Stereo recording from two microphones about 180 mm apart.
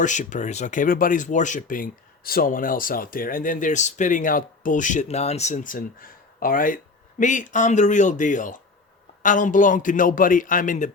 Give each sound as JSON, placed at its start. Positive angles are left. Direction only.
{"t": 0.0, "sound": "speech", "side_deg": 45}